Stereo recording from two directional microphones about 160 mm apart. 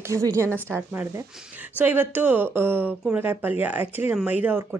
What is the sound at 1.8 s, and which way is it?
Speech, 10° right (ahead or behind).